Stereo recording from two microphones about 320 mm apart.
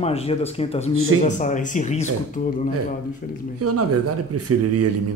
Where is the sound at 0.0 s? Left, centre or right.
Centre.